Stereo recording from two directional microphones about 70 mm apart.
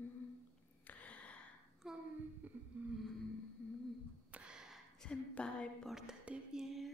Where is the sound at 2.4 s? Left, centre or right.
Right.